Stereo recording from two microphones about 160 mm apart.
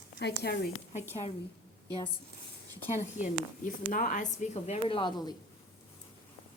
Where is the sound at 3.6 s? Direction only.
55° left (ahead or behind); by 5.3 s 25° left (ahead or behind).